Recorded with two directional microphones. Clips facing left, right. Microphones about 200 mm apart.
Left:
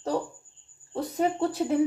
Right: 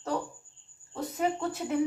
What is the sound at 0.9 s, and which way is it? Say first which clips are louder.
Speech: left 4 dB; 35° left (ahead or behind).